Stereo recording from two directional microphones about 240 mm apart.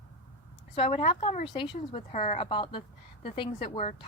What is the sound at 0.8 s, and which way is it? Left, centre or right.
A woman's voice, left.